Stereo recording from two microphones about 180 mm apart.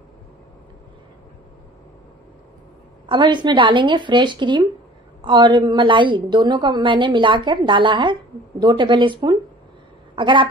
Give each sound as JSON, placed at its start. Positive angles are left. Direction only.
{"t": 3.1, "sound": "a woman's voice", "side_deg": -25}